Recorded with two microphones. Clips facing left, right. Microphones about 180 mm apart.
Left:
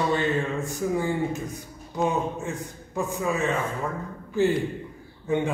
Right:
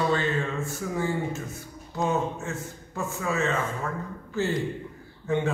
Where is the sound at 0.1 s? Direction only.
15° left (ahead or behind).